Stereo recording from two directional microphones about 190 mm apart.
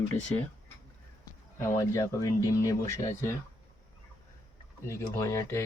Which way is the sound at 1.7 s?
15° left (ahead or behind).